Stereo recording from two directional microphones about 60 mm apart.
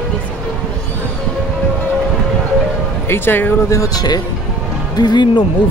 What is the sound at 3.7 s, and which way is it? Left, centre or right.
Speech, left.